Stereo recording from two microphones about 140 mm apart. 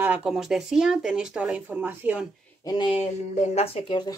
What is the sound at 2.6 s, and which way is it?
Speech, 35° left (ahead or behind).